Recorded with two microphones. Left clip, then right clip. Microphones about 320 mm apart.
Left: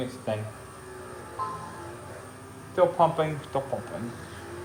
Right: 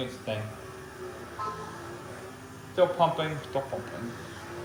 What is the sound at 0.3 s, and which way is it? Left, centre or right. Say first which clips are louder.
Speech: left 3 dB; left.